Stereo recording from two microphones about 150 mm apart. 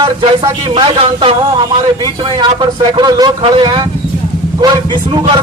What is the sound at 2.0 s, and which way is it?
A man's voice, 30° right (ahead or behind).